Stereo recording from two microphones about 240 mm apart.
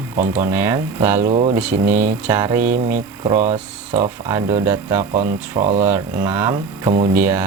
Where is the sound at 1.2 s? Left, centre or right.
Right.